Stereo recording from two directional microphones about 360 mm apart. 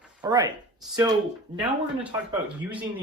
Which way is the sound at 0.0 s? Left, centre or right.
Centre.